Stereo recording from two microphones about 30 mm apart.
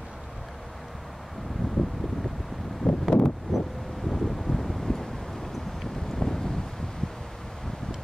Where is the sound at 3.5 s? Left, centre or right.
Centre.